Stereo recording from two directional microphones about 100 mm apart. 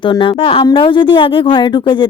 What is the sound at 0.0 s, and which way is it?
Speech, 55° left (ahead or behind).